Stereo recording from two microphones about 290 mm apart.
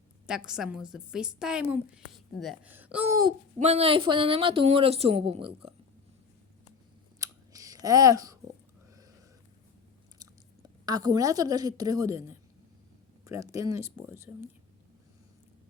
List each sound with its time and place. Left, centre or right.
0.3 s a woman's voice: centre
7.2 s scissors: centre
10.8 s speech: centre